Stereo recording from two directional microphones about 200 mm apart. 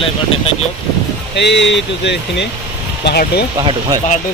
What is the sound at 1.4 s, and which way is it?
Speech, 60° left (ahead or behind).